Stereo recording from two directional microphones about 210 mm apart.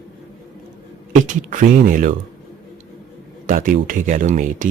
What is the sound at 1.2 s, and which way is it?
Speech, 40° right (ahead or behind).